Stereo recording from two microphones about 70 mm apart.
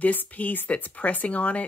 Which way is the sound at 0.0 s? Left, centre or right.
Left.